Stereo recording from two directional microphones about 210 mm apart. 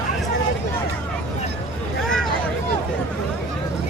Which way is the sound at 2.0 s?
Centre (ahead or behind).